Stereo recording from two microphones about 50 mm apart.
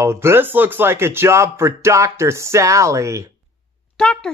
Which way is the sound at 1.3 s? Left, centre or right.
Right.